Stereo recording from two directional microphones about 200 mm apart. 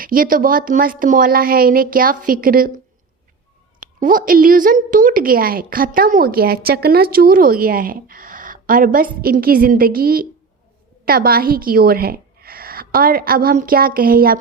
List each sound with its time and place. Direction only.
0.0 s a woman's voice: 45° right (ahead or behind)
3.8 s a woman's voice: 45° right (ahead or behind)